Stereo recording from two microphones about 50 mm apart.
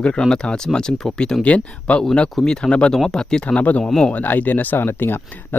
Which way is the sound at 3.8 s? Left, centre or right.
Centre.